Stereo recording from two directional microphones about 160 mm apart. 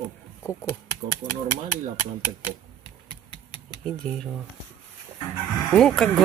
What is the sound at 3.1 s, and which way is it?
Engine, 30° left (ahead or behind).